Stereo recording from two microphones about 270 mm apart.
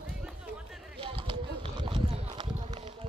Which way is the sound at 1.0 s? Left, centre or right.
Centre.